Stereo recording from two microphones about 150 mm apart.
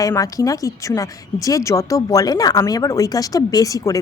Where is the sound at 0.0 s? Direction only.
20° left (ahead or behind).